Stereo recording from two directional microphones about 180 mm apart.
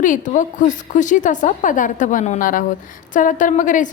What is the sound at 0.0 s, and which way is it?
A woman's voice, 45° left (ahead or behind).